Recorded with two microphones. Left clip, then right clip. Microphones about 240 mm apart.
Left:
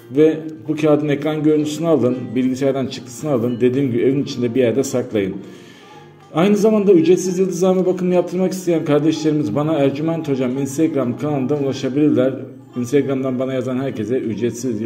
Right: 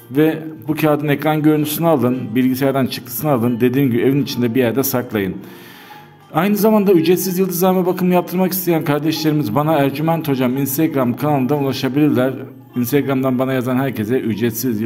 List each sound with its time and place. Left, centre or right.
0.7 s a man's voice: right
6.3 s a man's voice: right